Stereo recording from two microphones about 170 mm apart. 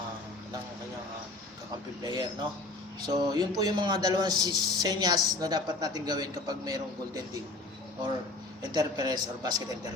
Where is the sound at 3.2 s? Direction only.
25° right (ahead or behind).